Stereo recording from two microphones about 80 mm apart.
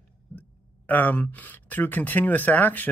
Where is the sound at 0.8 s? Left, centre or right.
Left.